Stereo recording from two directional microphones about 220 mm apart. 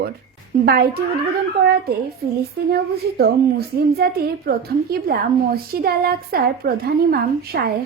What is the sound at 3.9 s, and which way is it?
A woman's voice, 45° right (ahead or behind).